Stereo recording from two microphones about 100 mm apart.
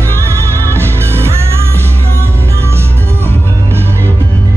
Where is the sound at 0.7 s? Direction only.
25° right (ahead or behind).